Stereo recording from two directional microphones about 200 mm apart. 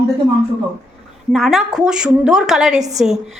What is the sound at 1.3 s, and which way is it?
A woman's voice, centre (ahead or behind).